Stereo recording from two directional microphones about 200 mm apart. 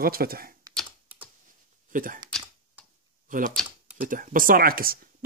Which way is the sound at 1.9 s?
40° right (ahead or behind).